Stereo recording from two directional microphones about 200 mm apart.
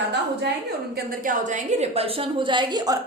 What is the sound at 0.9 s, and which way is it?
A woman's voice, 40° right (ahead or behind).